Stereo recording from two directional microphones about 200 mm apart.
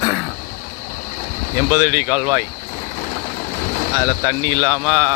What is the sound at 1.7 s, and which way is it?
Speech, 15° right (ahead or behind).